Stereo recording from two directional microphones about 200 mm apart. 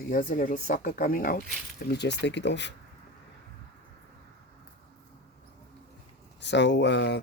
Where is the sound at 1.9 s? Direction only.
60° left (ahead or behind).